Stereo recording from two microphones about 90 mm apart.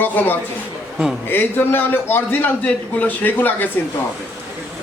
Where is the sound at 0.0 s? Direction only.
20° left (ahead or behind).